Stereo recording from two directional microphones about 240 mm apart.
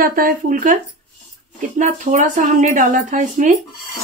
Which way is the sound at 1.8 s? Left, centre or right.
Right.